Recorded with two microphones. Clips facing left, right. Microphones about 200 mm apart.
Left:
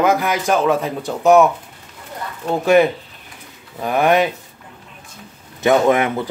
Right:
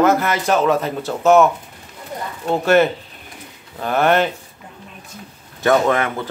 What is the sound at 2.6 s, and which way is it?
Speech, centre (ahead or behind).